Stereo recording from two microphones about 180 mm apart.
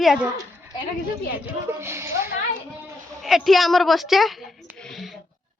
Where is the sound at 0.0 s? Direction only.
Centre (ahead or behind).